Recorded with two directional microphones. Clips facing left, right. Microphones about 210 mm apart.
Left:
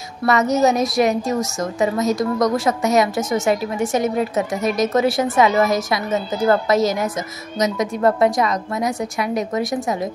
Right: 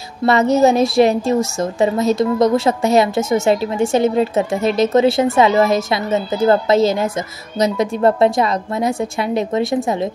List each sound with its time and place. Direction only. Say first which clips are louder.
0.2 s a woman's voice: right 4 dB; 30° right (ahead or behind)